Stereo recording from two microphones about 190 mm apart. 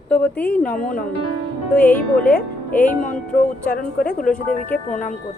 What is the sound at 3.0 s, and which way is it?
Music, 45° left (ahead or behind).